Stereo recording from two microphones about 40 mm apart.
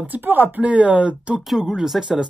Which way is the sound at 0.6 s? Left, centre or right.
Right.